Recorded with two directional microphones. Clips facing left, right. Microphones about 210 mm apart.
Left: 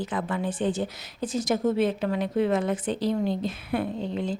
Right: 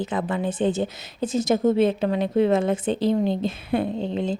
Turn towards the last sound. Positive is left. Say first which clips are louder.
# right 4 dB
turn(degrees=-25)  # may be behind; listen again after turning